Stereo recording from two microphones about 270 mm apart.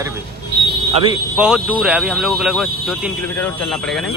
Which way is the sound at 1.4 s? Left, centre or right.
Centre.